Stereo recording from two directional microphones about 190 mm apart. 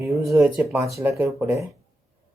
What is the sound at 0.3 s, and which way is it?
Speech, 15° right (ahead or behind).